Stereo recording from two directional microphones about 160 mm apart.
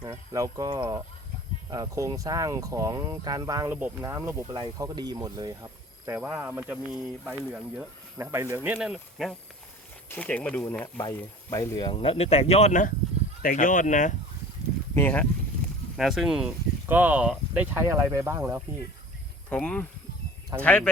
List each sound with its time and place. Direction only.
0.1 s speech: 20° right (ahead or behind)
4.4 s speech: 30° right (ahead or behind)
6.1 s speech: 10° right (ahead or behind)
8.2 s speech: 15° right (ahead or behind)
10.1 s speech: 10° left (ahead or behind)
11.9 s speech: 35° left (ahead or behind)
13.4 s speech: 60° left (ahead or behind)
14.9 s speech: 10° left (ahead or behind)
16.0 s speech: centre (ahead or behind)
19.5 s speech: 5° left (ahead or behind)